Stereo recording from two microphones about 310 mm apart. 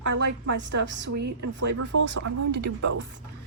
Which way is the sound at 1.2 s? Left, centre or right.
Right.